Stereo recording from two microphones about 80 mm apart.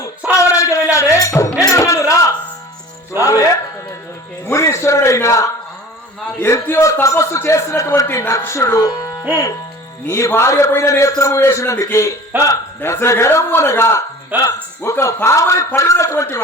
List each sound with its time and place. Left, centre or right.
0.3 s a sound: left
0.9 s music: left
4.4 s a man's voice: left
12.3 s speech: right
12.8 s a man's voice: left
14.3 s speech: right
14.8 s a man's voice: left